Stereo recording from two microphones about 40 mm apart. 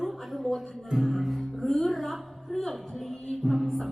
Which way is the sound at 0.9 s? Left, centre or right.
Centre.